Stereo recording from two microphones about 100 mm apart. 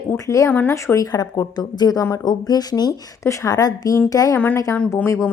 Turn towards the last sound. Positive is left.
turn(degrees=30)  # may be behind; listen again after turning